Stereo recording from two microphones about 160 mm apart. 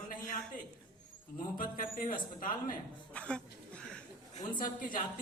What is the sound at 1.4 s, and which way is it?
A man's voice, 60° left (ahead or behind).